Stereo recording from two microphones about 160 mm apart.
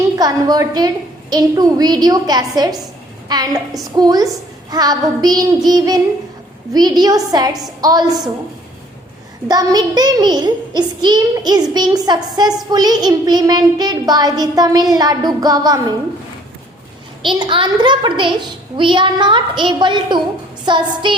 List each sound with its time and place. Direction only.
0.2 s child singing: 25° right (ahead or behind)
9.5 s child singing: 25° right (ahead or behind)
17.2 s child singing: 30° right (ahead or behind)